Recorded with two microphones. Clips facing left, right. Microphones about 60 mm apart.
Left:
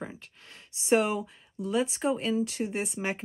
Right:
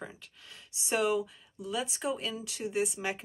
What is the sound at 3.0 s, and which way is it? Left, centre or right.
Speech, left.